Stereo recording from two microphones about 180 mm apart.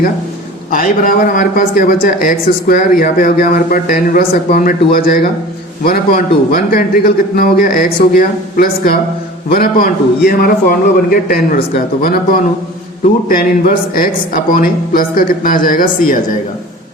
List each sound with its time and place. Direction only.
0.7 s a man's voice: 50° left (ahead or behind)